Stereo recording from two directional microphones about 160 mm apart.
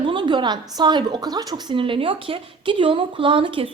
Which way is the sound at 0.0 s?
30° right (ahead or behind).